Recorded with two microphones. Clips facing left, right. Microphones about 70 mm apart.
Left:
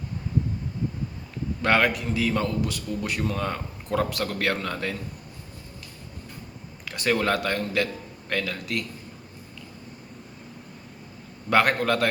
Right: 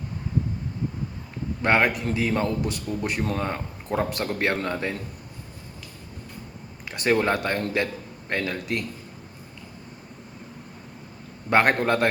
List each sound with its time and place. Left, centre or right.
1.6 s a man's voice: right
6.8 s a man's voice: right
11.4 s a man's voice: right